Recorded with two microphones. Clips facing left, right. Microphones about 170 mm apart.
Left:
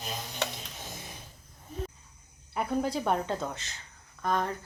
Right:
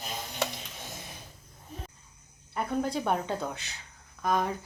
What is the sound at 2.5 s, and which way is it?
Speech, 5° left (ahead or behind).